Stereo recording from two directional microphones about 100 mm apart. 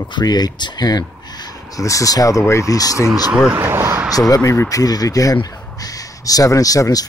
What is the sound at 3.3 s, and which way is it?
Speech, 10° right (ahead or behind).